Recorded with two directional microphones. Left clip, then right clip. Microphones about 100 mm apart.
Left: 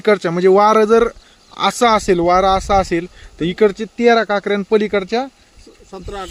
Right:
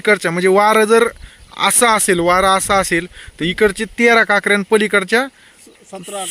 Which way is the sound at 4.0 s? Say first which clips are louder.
Right 2 dB; 15° right (ahead or behind).